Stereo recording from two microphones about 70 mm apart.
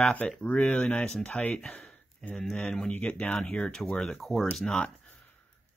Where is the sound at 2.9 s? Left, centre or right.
Centre.